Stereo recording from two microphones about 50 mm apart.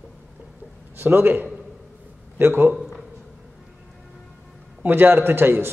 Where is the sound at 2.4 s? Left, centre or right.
Right.